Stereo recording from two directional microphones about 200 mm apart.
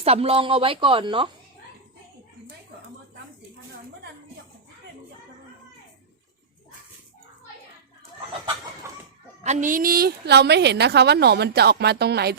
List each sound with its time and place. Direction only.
0.0 s a woman's voice: 30° right (ahead or behind)
9.4 s a woman's voice: 35° right (ahead or behind); by 12.4 s 55° right (ahead or behind)